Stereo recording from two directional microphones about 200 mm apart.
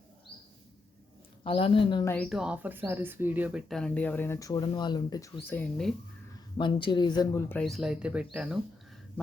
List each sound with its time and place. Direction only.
1.5 s speech: 25° left (ahead or behind)
2.0 s speech: 5° left (ahead or behind)
3.7 s speech: 5° left (ahead or behind)
6.6 s speech: 25° left (ahead or behind); by 8.5 s 5° right (ahead or behind)